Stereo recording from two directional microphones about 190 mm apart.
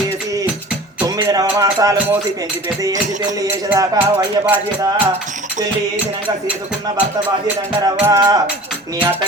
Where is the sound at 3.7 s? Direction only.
10° right (ahead or behind).